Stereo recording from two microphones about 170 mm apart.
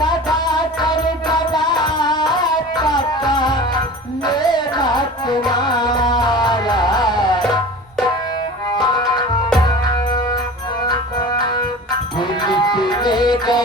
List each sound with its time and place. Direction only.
0.5 s music: 25° left (ahead or behind)
8.8 s music: 25° left (ahead or behind)
10.8 s music: 25° left (ahead or behind)